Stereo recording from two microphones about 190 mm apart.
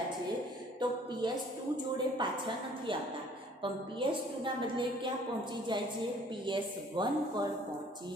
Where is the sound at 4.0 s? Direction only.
25° right (ahead or behind).